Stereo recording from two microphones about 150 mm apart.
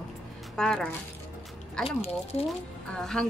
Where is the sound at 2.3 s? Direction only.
40° left (ahead or behind).